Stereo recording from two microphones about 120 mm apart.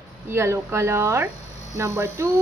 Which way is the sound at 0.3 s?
20° right (ahead or behind).